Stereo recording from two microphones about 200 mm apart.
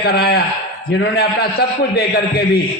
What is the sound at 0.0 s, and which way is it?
A man's voice, 55° left (ahead or behind).